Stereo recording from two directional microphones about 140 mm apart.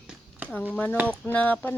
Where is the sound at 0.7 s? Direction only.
10° left (ahead or behind).